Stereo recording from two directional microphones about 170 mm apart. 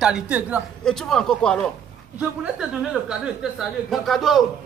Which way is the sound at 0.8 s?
5° left (ahead or behind).